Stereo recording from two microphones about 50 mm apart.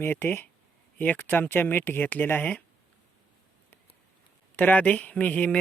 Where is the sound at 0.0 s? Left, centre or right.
Left.